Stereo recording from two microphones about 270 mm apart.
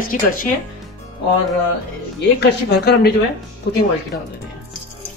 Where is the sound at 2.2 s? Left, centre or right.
Left.